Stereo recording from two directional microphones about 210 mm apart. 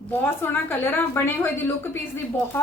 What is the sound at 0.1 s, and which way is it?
A woman's voice, 10° left (ahead or behind).